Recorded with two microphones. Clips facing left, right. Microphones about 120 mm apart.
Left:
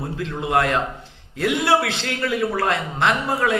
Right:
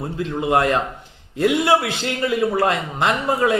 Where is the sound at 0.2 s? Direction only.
20° right (ahead or behind).